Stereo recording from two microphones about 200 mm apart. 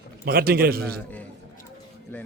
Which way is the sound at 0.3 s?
50° right (ahead or behind).